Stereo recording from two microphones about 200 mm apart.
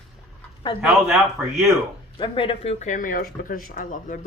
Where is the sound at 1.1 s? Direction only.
Centre (ahead or behind).